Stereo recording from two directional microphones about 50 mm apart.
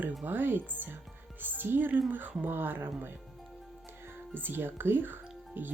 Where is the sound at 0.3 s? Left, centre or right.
Right.